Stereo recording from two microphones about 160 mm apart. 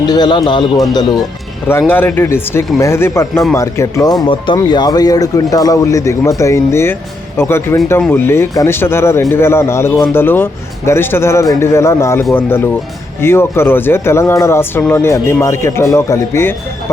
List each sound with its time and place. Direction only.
0.1 s speech: 25° left (ahead or behind)
1.9 s speech: 10° left (ahead or behind)